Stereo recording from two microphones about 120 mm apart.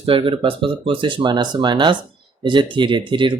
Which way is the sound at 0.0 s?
50° right (ahead or behind).